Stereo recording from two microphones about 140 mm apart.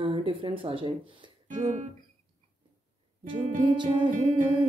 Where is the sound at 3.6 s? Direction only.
35° right (ahead or behind).